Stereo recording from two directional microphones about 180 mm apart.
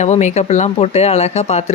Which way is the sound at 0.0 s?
40° left (ahead or behind).